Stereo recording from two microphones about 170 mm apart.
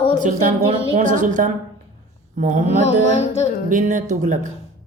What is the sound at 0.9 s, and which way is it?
Speech, 45° right (ahead or behind).